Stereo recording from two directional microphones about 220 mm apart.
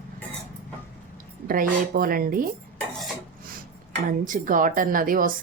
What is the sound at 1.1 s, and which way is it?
Speech, 40° right (ahead or behind).